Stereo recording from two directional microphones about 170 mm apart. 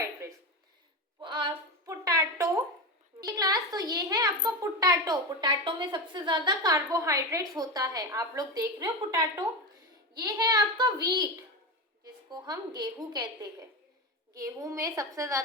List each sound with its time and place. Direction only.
0.0 s a sound: 20° right (ahead or behind)
3.2 s a woman's voice: 20° right (ahead or behind)
12.3 s a woman's voice: 25° right (ahead or behind)